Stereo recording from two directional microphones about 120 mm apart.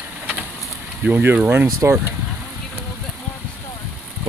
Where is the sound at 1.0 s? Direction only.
15° right (ahead or behind).